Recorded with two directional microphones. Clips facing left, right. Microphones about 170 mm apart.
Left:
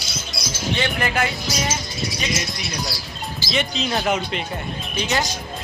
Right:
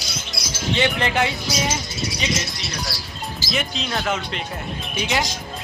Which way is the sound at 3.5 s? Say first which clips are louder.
Left 3 dB; centre (ahead or behind).